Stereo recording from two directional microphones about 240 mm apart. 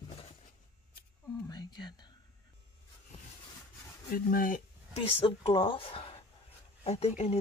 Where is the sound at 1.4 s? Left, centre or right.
Centre.